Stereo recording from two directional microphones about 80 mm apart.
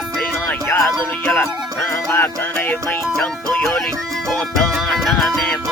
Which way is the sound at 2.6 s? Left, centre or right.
Centre.